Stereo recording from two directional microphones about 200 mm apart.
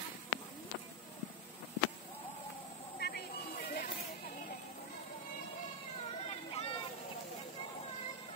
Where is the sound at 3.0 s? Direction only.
55° left (ahead or behind).